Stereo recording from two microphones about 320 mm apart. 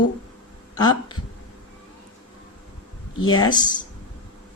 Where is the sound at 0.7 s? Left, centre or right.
Centre.